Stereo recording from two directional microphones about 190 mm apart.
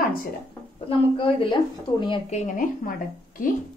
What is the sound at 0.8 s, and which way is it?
A woman's voice, 30° left (ahead or behind).